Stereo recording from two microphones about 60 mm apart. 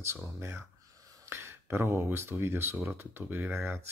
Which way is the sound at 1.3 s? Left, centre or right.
Right.